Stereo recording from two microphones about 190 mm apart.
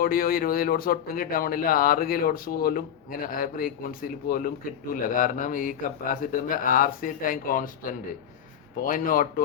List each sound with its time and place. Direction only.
0.0 s a man's voice: 50° left (ahead or behind)